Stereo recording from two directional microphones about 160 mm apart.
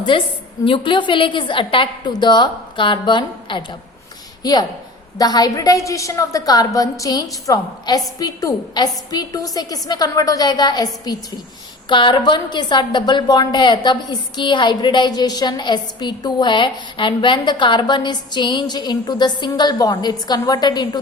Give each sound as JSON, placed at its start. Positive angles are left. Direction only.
{"t": 0.1, "sound": "a woman's voice", "side_deg": 30}